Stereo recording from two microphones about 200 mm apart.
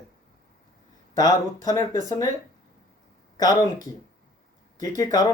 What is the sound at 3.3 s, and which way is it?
Speech, 20° left (ahead or behind).